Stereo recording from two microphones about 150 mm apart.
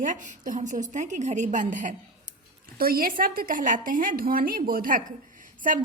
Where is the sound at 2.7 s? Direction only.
80° right.